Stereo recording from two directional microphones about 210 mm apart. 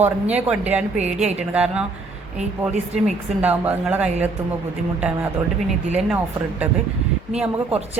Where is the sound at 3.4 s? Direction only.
5° right (ahead or behind).